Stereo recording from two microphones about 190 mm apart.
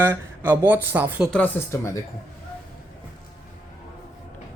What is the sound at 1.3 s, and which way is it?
Speech, 10° left (ahead or behind).